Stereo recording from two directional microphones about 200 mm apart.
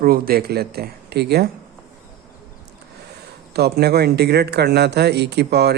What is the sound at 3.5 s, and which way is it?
A man's voice, 50° right (ahead or behind).